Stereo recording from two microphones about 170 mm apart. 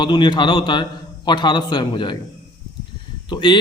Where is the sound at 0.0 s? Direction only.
25° left (ahead or behind).